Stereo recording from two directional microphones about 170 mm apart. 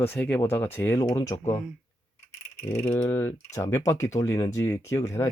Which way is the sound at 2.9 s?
10° left (ahead or behind).